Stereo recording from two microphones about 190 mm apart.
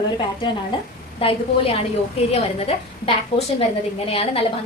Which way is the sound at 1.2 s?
30° left (ahead or behind).